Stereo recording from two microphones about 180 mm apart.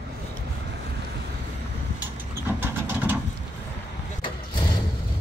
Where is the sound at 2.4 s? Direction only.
10° right (ahead or behind).